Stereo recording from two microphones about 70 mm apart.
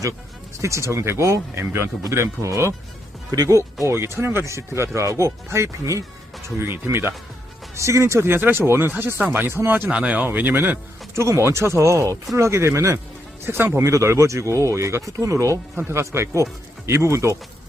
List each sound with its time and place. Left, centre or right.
0.6 s speech: right
3.3 s speech: right
3.8 s speech: right
9.5 s speech: right
9.9 s speech: centre
10.2 s speech: right
11.2 s speech: right